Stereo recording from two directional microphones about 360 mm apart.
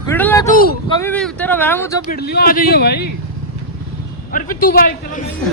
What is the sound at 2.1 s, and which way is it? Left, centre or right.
Speech, left.